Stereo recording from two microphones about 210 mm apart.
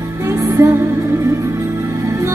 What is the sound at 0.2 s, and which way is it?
Music, 15° right (ahead or behind).